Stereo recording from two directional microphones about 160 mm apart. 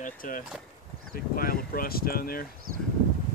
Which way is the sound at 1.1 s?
65° left (ahead or behind).